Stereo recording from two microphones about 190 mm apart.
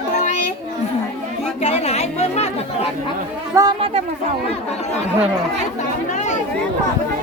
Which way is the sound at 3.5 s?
20° right (ahead or behind).